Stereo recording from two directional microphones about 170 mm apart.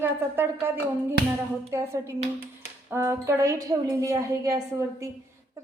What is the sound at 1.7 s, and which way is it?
Speech, 15° right (ahead or behind).